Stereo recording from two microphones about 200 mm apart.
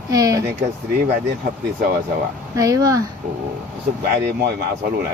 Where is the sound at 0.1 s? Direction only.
15° right (ahead or behind).